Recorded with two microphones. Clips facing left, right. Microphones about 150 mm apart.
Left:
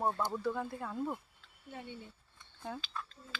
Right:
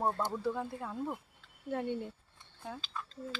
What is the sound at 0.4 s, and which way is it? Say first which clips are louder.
Speech: right 1 dB; 20° right (ahead or behind).